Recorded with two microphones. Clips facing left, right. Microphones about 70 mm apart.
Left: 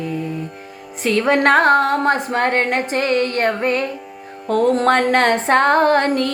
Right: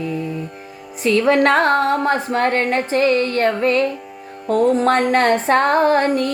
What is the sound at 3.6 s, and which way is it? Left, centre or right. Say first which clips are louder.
Music: right 3 dB; left.